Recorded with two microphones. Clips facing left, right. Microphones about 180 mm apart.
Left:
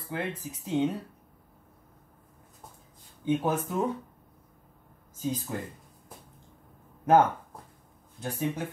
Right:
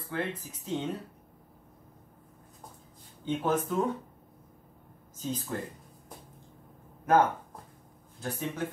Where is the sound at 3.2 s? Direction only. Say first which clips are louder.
Left 2 dB; 10° left (ahead or behind).